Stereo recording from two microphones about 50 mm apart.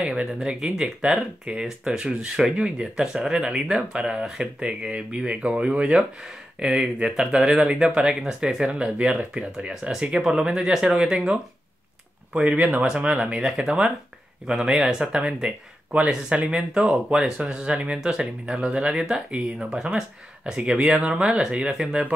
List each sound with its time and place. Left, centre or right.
0.1 s speech: centre
11.0 s speech: centre
16.3 s speech: right